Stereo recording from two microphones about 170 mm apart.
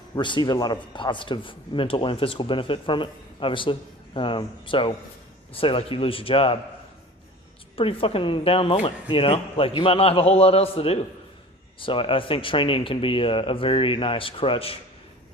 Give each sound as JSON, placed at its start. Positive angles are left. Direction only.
{"t": 0.2, "sound": "a man's voice", "side_deg": 25}
{"t": 7.8, "sound": "speech", "side_deg": 35}